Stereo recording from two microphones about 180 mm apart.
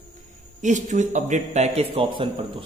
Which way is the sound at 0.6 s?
40° right (ahead or behind).